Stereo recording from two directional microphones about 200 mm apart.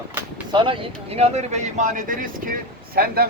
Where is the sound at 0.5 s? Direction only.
25° right (ahead or behind).